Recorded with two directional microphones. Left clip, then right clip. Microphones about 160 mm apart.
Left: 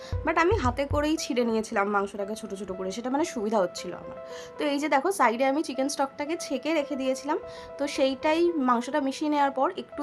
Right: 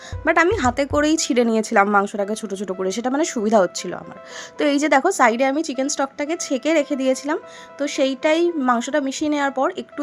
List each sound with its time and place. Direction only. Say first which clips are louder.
0.3 s speech: right 7 dB; 25° right (ahead or behind)
3.1 s a woman's voice: right 8 dB; 25° right (ahead or behind)
7.8 s a woman's voice: right 6 dB; 20° right (ahead or behind)